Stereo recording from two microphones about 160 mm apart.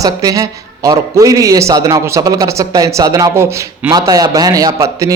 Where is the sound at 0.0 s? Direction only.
20° right (ahead or behind).